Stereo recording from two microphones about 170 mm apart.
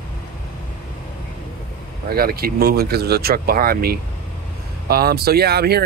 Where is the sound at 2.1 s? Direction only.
65° right (ahead or behind).